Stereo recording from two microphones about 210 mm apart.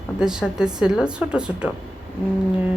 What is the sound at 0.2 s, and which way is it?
A woman's voice, 5° right (ahead or behind).